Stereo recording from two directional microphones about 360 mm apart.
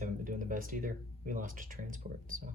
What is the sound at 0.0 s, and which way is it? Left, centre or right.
Speech, right.